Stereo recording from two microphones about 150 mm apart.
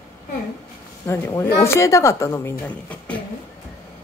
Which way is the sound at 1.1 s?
15° left (ahead or behind).